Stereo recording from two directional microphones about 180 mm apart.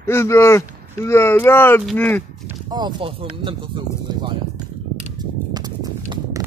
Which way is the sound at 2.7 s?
25° right (ahead or behind).